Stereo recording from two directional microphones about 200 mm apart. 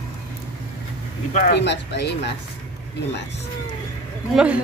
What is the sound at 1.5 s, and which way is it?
Speech, 60° left (ahead or behind).